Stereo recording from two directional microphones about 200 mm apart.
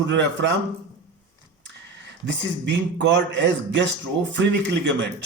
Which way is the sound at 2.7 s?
65° right (ahead or behind).